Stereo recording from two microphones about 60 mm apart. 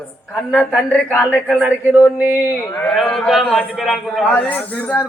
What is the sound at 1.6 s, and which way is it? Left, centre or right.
Speech, right.